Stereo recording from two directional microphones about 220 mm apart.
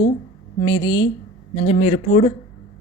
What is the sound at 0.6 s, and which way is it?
A woman's voice, 20° left (ahead or behind).